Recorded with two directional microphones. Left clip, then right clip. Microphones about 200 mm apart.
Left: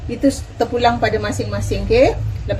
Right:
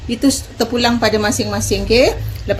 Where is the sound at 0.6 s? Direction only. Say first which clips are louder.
Left 1 dB; 50° right (ahead or behind).